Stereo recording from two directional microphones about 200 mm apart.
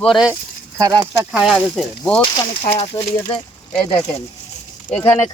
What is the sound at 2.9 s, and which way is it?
Speech, 15° left (ahead or behind).